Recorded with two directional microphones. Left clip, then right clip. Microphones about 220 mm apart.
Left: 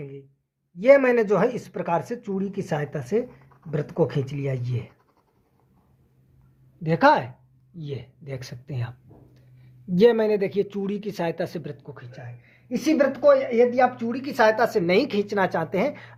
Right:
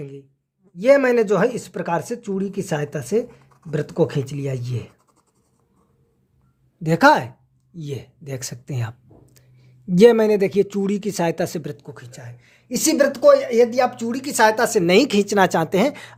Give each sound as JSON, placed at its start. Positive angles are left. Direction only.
{"t": 0.0, "sound": "speech", "side_deg": -30}
{"t": 6.8, "sound": "speech", "side_deg": -40}